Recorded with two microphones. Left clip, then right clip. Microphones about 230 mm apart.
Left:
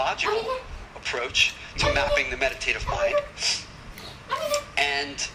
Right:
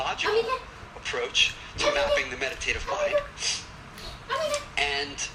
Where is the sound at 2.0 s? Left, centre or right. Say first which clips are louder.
Left 2 dB; left.